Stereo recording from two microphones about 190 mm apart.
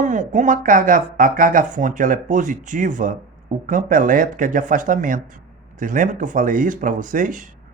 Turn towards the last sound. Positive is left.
turn(degrees=-45)  # may be behind; listen again after turning